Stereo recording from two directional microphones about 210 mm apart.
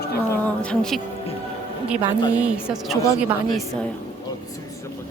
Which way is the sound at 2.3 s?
5° right (ahead or behind).